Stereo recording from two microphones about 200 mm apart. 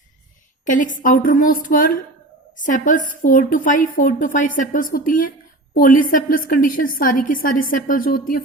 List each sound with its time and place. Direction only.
0.6 s a woman's voice: 40° left (ahead or behind)